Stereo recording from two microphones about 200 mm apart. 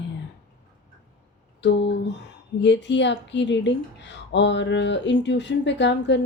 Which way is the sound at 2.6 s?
60° left (ahead or behind).